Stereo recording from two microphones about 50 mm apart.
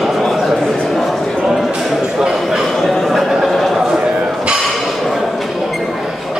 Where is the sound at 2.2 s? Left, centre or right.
Centre.